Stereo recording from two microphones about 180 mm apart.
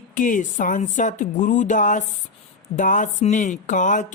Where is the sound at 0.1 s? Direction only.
45° left (ahead or behind).